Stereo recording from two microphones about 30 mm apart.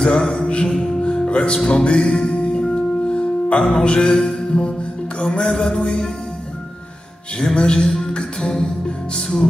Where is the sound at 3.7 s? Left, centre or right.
Left.